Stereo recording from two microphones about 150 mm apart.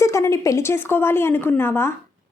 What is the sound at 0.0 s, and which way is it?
Speech, 20° left (ahead or behind).